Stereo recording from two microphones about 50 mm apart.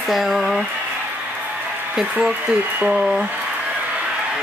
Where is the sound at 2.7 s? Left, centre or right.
Right.